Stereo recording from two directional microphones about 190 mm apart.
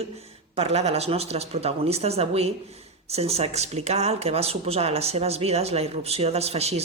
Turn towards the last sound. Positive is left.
turn(degrees=-35)  # may be behind; listen again after turning